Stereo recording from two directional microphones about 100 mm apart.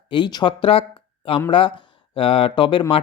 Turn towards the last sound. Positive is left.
turn(degrees=60)  # may be behind; listen again after turning